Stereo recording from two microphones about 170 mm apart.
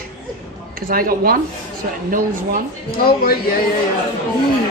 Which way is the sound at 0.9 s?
60° right (ahead or behind).